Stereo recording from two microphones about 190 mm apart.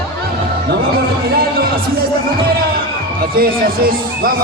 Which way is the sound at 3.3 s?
50° right (ahead or behind).